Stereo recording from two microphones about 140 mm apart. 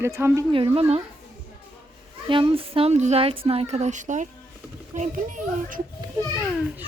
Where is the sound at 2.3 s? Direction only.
40° right (ahead or behind); by 5.8 s 70° right (ahead or behind).